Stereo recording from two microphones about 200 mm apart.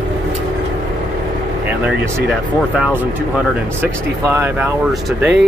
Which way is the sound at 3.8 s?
15° right (ahead or behind).